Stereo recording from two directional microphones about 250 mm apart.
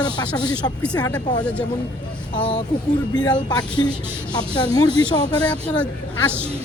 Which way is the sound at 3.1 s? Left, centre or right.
Centre.